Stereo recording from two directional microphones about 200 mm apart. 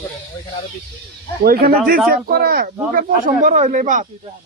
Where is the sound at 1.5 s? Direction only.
50° right (ahead or behind).